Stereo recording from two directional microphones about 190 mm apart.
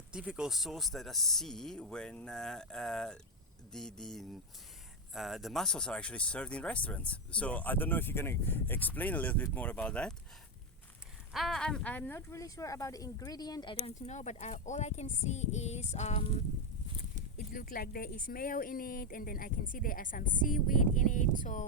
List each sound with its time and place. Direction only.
0.1 s speech: 5° right (ahead or behind)
11.3 s speech: centre (ahead or behind); by 13.7 s 20° left (ahead or behind)
13.7 s speech: 35° left (ahead or behind)
17.3 s speech: 50° left (ahead or behind)